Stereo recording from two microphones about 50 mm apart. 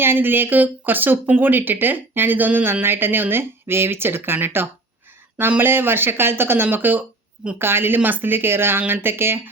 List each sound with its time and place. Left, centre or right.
0.0 s speech: right
2.8 s speech: right
7.6 s speech: right